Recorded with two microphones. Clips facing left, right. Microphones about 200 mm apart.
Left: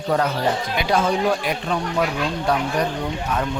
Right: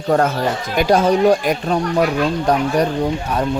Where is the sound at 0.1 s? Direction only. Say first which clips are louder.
Right 4 dB; 45° right (ahead or behind).